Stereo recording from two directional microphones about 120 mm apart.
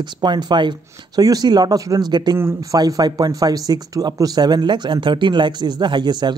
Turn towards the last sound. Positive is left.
turn(degrees=-35)  # may be behind; listen again after turning